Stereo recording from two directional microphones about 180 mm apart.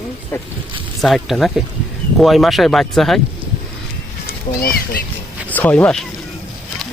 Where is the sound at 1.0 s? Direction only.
Centre (ahead or behind).